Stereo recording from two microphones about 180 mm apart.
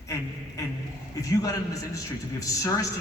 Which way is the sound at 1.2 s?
20° left (ahead or behind).